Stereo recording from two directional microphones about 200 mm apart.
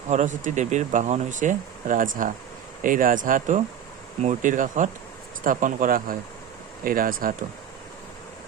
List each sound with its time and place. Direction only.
0.1 s speech: 35° right (ahead or behind)